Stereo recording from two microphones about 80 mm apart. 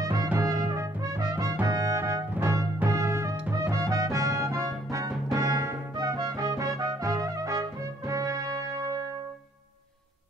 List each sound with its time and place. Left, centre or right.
0.0 s music: right
0.4 s brass instrument: right
1.7 s music: right
5.9 s trumpet: right